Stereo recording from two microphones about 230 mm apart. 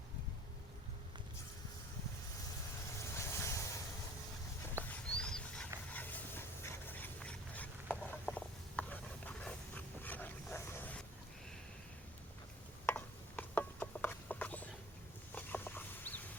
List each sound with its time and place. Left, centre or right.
3.0 s boat: centre
4.9 s dog: centre
12.8 s a sound: centre
15.4 s bird: centre